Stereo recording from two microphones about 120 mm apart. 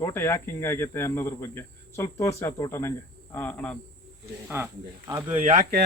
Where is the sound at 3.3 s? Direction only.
15° left (ahead or behind).